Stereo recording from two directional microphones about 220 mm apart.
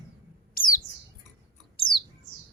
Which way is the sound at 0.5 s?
40° left (ahead or behind).